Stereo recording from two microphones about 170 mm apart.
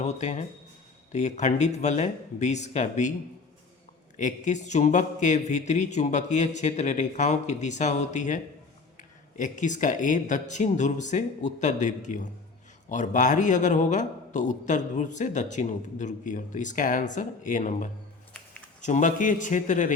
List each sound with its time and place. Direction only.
0.0 s a man's voice: 45° left (ahead or behind)
4.2 s a man's voice: 45° left (ahead or behind)